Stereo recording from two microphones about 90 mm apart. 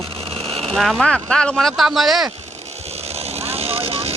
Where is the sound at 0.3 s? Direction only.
90° right.